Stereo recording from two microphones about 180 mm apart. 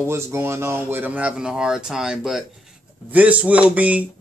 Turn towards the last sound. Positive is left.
turn(degrees=-10)  # may be behind; listen again after turning